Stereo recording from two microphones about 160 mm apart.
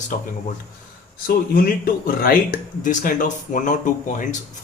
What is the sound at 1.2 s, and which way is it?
Speech, 65° left (ahead or behind).